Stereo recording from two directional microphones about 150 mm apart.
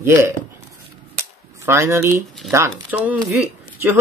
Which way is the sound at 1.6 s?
15° right (ahead or behind).